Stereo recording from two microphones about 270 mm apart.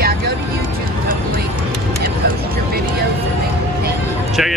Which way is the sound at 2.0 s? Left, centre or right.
Right.